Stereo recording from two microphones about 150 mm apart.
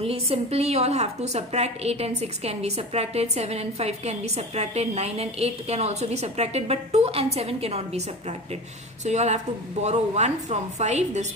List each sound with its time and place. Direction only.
0.0 s a woman's voice: 40° right (ahead or behind)